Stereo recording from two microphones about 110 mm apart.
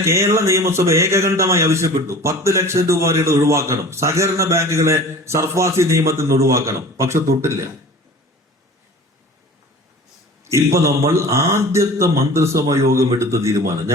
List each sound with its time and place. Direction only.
0.0 s a man's voice: 25° right (ahead or behind)
10.4 s a man's voice: 25° right (ahead or behind)